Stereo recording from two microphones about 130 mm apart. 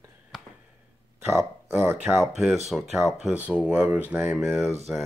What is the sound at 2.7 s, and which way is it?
Speech, 5° right (ahead or behind).